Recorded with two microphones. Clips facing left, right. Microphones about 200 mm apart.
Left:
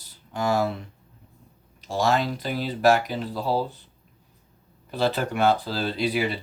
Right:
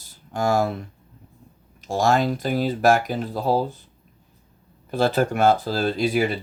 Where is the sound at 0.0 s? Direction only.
45° right (ahead or behind).